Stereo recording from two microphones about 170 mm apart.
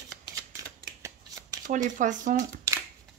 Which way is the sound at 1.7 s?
45° right (ahead or behind).